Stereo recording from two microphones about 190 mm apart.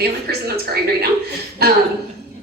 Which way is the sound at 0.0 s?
55° right (ahead or behind).